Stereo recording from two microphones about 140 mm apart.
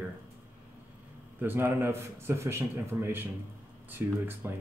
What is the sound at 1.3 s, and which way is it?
Speech, 15° right (ahead or behind).